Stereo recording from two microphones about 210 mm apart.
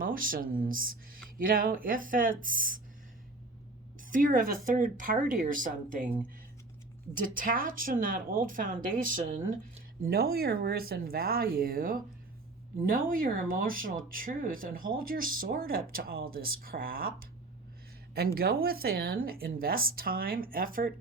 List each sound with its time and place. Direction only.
0.0 s speech: 40° right (ahead or behind)
4.0 s speech: 40° right (ahead or behind)
7.1 s speech: 40° right (ahead or behind)
18.3 s speech: 45° right (ahead or behind)